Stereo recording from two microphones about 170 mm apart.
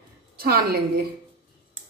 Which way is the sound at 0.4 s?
60° right (ahead or behind).